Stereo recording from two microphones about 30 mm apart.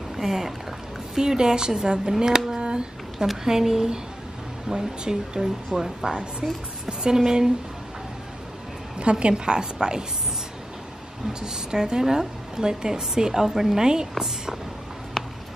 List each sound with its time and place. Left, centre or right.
0.1 s speech: centre
1.1 s a woman's voice: right
2.6 s a sound: right
3.4 s a woman's voice: centre
6.4 s a woman's voice: centre
6.9 s a woman's voice: right
8.9 s a woman's voice: right
11.4 s a woman's voice: right